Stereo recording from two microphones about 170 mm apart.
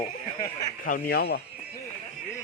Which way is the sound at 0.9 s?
65° left (ahead or behind).